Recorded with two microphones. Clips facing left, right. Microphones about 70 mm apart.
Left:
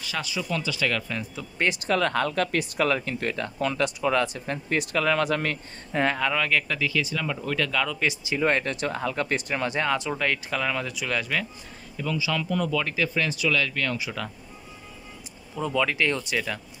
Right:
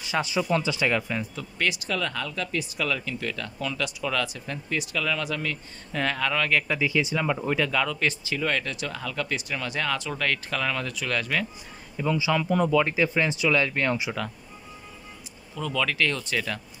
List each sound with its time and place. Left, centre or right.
0.0 s speech: right
1.6 s speech: left
2.8 s speech: left
5.9 s speech: centre
6.7 s speech: centre
7.5 s speech: centre
8.4 s speech: left; by 11.4 s centre
12.0 s speech: right
15.5 s speech: centre
16.3 s speech: centre